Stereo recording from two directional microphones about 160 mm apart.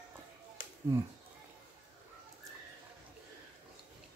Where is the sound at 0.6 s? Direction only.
60° left (ahead or behind).